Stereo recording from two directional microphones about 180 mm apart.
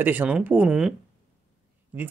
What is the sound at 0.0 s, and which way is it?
Speech, 10° right (ahead or behind).